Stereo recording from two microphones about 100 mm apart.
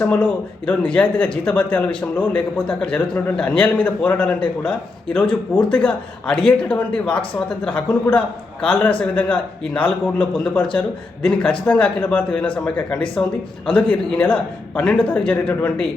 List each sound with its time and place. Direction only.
0.0 s a man's voice: 20° left (ahead or behind)